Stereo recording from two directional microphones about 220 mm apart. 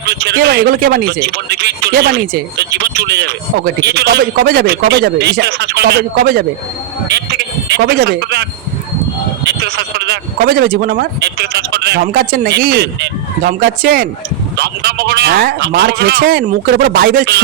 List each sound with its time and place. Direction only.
0.1 s speech: 50° right (ahead or behind)
9.5 s speech: 50° right (ahead or behind)